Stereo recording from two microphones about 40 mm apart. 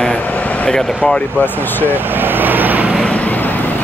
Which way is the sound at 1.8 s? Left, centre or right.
Right.